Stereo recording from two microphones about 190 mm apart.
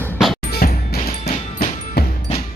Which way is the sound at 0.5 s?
55° left (ahead or behind).